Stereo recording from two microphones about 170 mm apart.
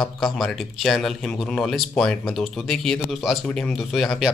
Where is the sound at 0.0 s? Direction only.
Centre (ahead or behind).